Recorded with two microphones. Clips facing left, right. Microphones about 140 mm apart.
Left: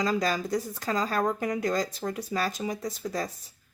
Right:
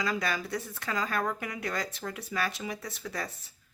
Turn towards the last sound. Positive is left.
turn(degrees=35)  # may be behind; listen again after turning